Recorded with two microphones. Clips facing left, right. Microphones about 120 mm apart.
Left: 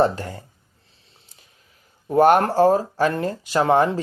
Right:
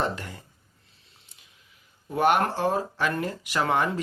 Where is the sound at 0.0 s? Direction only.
35° left (ahead or behind).